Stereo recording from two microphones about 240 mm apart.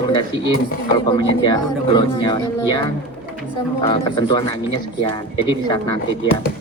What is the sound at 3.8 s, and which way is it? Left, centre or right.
Speech, centre.